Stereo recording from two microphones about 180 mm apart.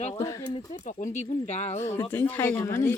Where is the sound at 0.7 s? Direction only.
45° left (ahead or behind).